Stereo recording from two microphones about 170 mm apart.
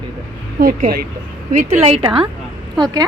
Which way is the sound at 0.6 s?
55° right (ahead or behind).